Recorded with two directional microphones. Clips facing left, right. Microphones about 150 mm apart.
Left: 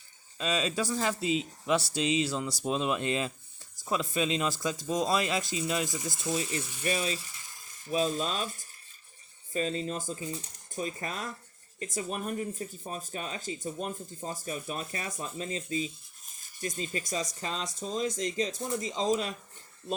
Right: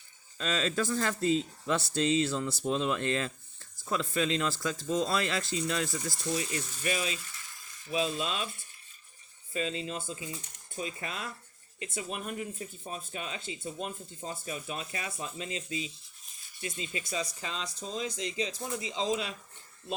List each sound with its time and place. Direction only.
0.3 s speech: 15° left (ahead or behind)
6.3 s ratchet: 25° left (ahead or behind)
9.5 s speech: 40° left (ahead or behind)